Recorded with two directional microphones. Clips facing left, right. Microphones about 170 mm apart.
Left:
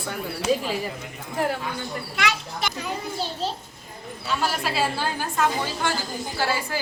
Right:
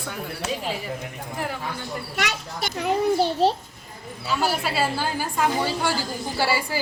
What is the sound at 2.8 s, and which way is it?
Speech, 65° right (ahead or behind).